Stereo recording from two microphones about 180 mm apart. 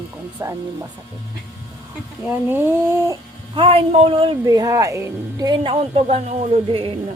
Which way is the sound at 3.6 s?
30° right (ahead or behind).